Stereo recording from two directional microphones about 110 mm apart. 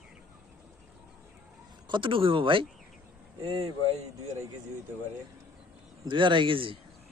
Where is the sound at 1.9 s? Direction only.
50° right (ahead or behind).